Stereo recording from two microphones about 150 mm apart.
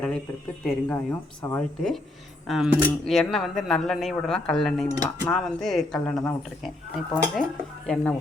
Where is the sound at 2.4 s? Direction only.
Centre (ahead or behind).